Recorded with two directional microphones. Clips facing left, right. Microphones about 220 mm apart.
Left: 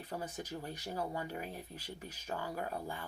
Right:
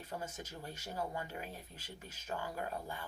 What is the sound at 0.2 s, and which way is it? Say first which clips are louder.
Speech: left 4 dB; 15° left (ahead or behind).